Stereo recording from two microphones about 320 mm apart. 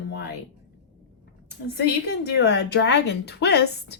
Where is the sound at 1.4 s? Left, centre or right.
Left.